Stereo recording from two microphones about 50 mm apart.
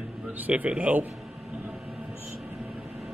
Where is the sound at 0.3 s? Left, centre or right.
Right.